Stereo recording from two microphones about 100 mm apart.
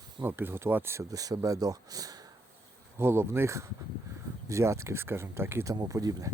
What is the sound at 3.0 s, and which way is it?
Speech, 25° right (ahead or behind).